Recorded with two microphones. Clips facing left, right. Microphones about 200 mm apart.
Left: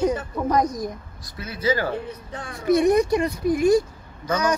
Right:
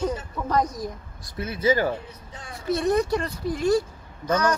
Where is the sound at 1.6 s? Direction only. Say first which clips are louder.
Right 1 dB; 20° right (ahead or behind).